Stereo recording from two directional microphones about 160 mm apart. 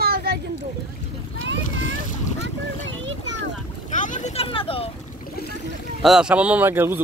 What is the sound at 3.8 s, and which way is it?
Vehicle, 50° left (ahead or behind).